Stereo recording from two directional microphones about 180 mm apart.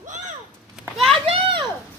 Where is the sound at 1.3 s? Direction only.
30° right (ahead or behind).